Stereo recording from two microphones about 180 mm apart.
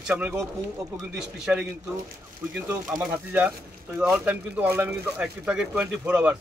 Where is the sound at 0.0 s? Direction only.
5° right (ahead or behind).